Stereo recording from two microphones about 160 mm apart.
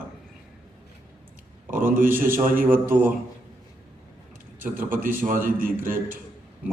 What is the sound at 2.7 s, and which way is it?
Speech, 10° right (ahead or behind).